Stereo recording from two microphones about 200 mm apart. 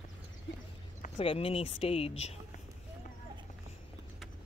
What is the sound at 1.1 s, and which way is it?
Speech, 25° left (ahead or behind).